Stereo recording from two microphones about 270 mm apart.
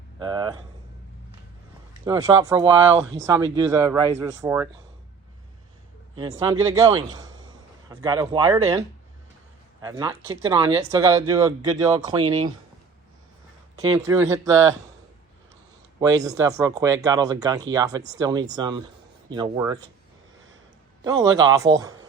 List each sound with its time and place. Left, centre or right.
0.2 s speech: centre
2.0 s speech: centre
6.1 s speech: centre
9.8 s speech: centre
14.1 s speech: centre
16.0 s speech: centre
21.0 s speech: centre